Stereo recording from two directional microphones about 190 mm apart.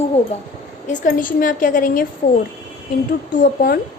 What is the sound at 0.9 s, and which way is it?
A woman's voice, 45° left (ahead or behind).